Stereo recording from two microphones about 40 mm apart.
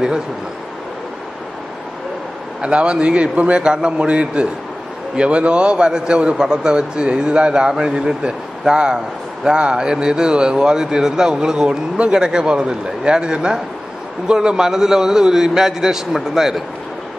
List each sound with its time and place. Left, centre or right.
2.6 s a man's voice: right; by 16.6 s centre